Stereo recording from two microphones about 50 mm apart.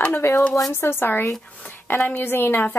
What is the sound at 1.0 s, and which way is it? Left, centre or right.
A woman's voice, left.